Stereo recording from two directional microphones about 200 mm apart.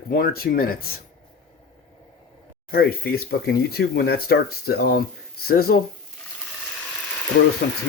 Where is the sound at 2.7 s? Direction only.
50° left (ahead or behind).